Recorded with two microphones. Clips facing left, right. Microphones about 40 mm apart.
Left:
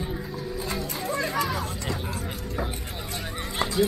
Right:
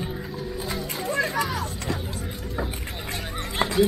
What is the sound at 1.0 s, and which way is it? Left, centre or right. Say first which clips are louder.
Children playing: right 4 dB; centre.